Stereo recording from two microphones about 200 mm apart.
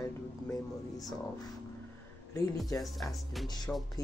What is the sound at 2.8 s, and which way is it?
Speech, centre (ahead or behind).